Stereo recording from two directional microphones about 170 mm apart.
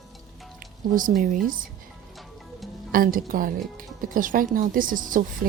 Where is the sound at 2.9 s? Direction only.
55° right (ahead or behind).